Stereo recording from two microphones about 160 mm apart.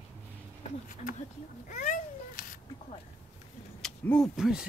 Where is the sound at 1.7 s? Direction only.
50° left (ahead or behind).